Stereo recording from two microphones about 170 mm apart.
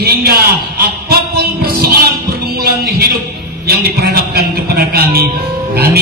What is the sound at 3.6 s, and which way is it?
A man's voice, 65° right (ahead or behind).